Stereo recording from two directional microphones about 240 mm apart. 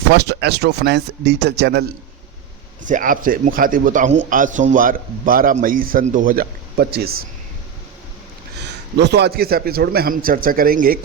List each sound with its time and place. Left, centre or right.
0.1 s speech: right
2.9 s speech: right
9.0 s speech: right